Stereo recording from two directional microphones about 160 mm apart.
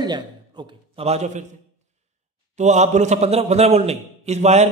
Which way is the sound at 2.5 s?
45° right (ahead or behind).